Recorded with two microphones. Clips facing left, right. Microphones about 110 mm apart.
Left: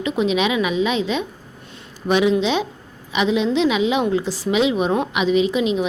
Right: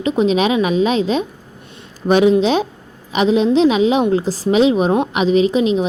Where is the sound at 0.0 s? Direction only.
35° right (ahead or behind).